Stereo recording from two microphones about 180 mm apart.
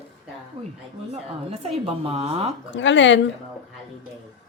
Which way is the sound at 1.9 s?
35° right (ahead or behind).